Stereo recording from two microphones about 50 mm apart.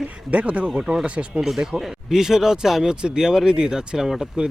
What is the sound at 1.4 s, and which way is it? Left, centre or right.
Speech, centre.